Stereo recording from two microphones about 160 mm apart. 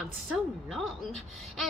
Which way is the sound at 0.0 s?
Centre (ahead or behind).